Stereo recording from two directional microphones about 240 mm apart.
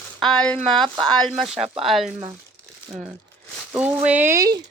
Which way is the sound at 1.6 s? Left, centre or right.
Right.